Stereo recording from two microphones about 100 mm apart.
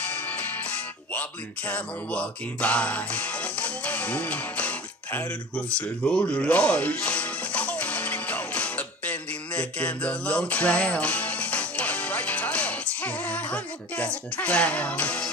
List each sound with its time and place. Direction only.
0.0 s music: 15° left (ahead or behind)